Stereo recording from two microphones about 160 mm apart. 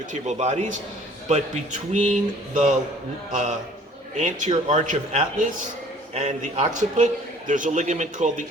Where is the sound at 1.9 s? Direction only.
50° right (ahead or behind).